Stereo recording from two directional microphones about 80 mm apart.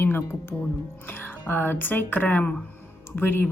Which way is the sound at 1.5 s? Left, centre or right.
Left.